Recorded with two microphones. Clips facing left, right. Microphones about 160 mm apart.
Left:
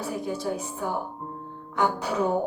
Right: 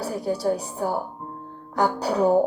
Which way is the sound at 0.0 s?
35° right (ahead or behind).